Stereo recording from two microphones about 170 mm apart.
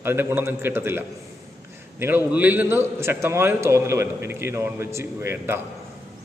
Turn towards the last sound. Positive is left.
turn(degrees=-15)  # may be behind; listen again after turning